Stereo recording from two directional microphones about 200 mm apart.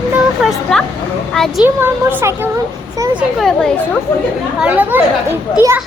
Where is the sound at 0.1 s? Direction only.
Centre (ahead or behind).